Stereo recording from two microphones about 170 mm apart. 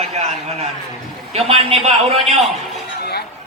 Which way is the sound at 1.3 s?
35° right (ahead or behind).